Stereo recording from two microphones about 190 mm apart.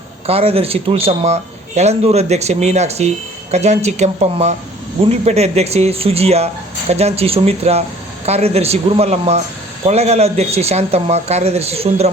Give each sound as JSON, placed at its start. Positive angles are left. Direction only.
{"t": 0.3, "sound": "a man's voice", "side_deg": -30}